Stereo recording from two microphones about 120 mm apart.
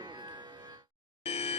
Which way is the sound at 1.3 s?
60° left (ahead or behind).